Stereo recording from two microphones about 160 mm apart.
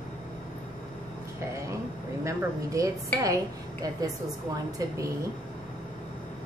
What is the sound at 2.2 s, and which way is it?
A woman's voice, 20° right (ahead or behind).